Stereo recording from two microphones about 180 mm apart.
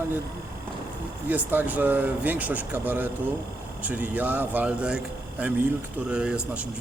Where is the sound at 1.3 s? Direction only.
10° right (ahead or behind).